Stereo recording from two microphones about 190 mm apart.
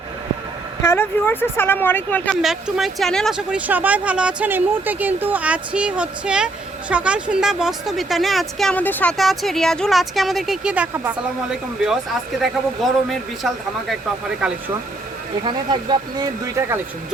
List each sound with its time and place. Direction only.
0.8 s speech: 10° left (ahead or behind); by 11.1 s 10° right (ahead or behind)
12.4 s speech: centre (ahead or behind)
15.4 s speech: 25° right (ahead or behind)